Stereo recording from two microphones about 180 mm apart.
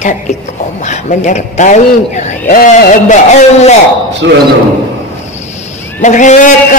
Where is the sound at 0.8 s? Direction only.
40° left (ahead or behind).